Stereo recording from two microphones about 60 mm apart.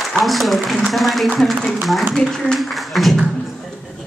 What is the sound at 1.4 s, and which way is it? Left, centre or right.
Speech, centre.